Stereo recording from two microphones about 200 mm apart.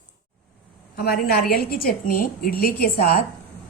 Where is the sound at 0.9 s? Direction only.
50° left (ahead or behind).